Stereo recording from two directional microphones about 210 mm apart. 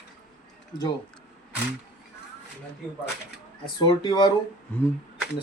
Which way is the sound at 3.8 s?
20° left (ahead or behind).